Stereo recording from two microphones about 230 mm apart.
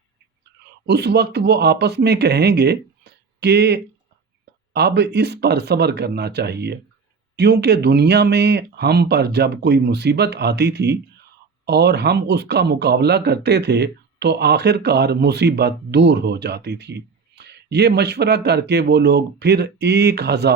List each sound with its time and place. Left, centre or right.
0.9 s speech: right